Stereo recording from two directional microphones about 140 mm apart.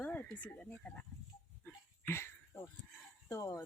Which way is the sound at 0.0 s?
10° left (ahead or behind).